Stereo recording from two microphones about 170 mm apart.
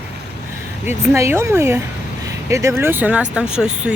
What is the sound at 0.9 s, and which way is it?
Speech, 15° right (ahead or behind).